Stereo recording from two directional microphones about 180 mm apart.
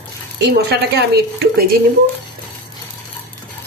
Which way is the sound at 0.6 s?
65° right (ahead or behind).